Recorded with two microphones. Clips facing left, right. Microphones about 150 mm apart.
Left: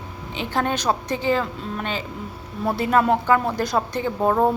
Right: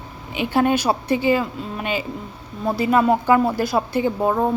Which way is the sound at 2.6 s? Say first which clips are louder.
Right 2 dB; centre (ahead or behind).